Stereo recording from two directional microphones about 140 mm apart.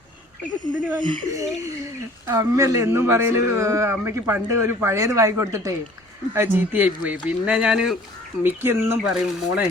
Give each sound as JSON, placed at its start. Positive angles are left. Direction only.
{"t": 0.9, "sound": "speech", "side_deg": -35}
{"t": 8.4, "sound": "speech", "side_deg": -15}
{"t": 9.0, "sound": "speech", "side_deg": -5}